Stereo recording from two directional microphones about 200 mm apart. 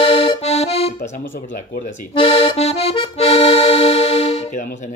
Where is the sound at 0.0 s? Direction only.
30° left (ahead or behind).